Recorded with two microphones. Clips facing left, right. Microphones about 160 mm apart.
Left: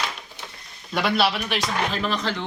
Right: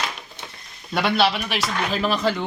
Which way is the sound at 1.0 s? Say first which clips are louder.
Right 2 dB; centre (ahead or behind).